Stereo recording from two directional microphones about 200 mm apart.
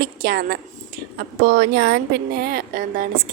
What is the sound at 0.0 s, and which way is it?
A woman's voice, 50° right (ahead or behind).